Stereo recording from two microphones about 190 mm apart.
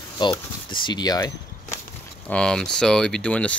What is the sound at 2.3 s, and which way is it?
Speech, 5° left (ahead or behind).